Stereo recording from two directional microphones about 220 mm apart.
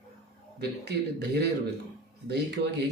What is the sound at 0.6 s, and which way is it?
Speech, 50° right (ahead or behind).